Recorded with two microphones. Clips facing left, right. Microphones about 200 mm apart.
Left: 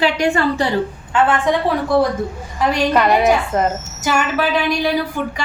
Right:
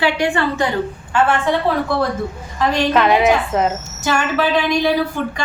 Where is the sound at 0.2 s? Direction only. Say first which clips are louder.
Left 1 dB; 35° left (ahead or behind).